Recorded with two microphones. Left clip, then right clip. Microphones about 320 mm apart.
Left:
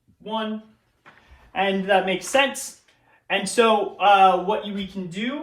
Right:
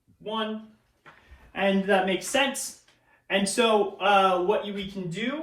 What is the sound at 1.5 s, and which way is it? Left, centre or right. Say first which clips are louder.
Speech: left 3 dB; centre.